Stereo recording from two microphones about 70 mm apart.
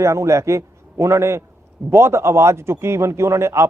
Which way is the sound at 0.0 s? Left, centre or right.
Right.